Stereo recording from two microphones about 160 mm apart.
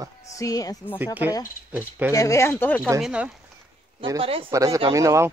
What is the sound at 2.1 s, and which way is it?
Speech, 20° left (ahead or behind).